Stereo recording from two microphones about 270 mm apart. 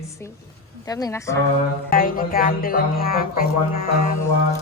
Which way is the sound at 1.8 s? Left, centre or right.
Left.